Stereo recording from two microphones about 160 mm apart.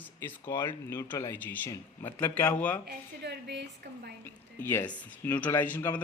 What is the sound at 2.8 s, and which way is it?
A woman's voice, 90° right.